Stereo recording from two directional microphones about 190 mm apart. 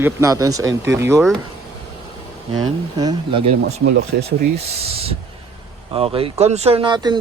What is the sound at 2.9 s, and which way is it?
Speech, 20° right (ahead or behind).